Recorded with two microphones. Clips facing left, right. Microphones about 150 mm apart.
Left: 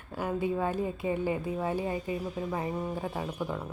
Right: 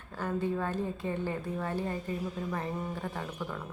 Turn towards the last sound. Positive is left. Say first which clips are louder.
# left 4 dB
turn(degrees=15)  # may be behind; listen again after turning